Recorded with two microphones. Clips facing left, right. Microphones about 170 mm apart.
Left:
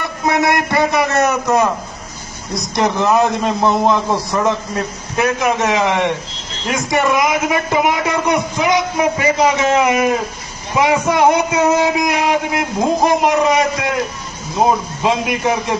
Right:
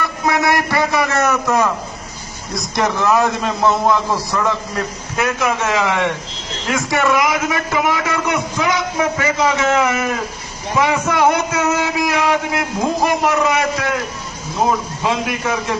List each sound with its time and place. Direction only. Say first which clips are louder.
0.0 s a man's voice: left 1 dB; 20° left (ahead or behind)
2.7 s a man's voice: left 1 dB; 20° left (ahead or behind)